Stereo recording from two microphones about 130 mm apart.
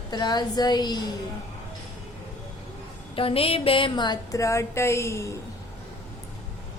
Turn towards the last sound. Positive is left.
turn(degrees=20)  # may be behind; listen again after turning